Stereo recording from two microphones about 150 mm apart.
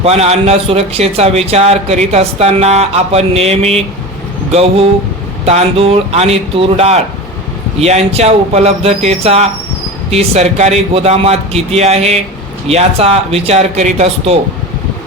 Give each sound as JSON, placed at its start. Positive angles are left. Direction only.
{"t": 0.0, "sound": "speech", "side_deg": -45}
{"t": 5.5, "sound": "speech", "side_deg": -40}